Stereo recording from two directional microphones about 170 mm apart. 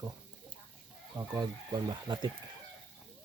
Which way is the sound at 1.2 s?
25° right (ahead or behind).